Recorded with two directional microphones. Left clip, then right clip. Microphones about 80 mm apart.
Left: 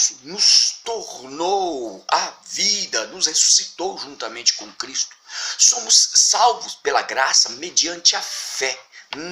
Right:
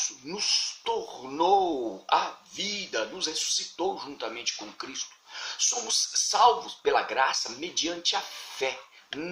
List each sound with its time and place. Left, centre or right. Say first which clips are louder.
0.0 s speech: left 12 dB; right
2.0 s speech: left 5 dB; right
5.9 s speech: left 12 dB; right
6.8 s speech: left 5 dB; right